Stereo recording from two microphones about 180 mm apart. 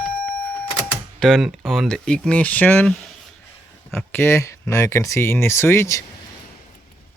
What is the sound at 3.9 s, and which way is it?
Speech, 10° left (ahead or behind).